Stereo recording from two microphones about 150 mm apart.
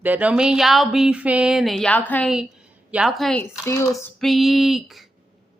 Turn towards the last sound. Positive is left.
turn(degrees=0)  # may be behind; listen again after turning